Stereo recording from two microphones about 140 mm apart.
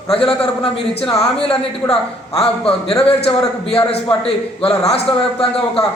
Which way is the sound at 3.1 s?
45° left (ahead or behind).